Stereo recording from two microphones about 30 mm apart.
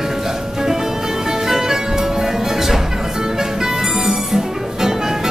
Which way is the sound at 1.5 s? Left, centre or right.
Centre.